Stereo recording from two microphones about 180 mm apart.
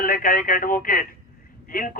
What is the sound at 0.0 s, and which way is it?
A man's voice, 50° left (ahead or behind).